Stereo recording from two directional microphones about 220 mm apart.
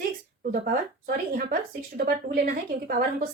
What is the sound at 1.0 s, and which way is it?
Speech, 40° right (ahead or behind).